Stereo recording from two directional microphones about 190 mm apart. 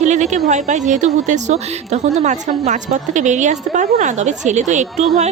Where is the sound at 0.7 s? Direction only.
40° right (ahead or behind).